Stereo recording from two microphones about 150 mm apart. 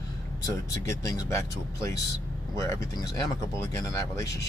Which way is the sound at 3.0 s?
25° left (ahead or behind).